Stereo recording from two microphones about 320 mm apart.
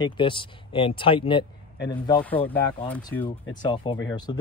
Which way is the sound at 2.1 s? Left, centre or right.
Centre.